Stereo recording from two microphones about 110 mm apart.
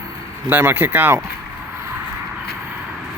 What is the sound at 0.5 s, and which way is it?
Speech, 20° right (ahead or behind).